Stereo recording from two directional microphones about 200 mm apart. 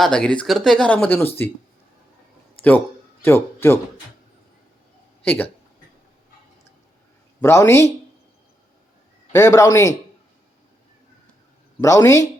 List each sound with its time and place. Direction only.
0.0 s speech: 5° left (ahead or behind)
3.2 s a man's voice: 10° left (ahead or behind)
5.2 s speech: 10° left (ahead or behind)
7.4 s a man's voice: 15° left (ahead or behind)
9.3 s a man's voice: 15° left (ahead or behind)
11.8 s a man's voice: 15° left (ahead or behind)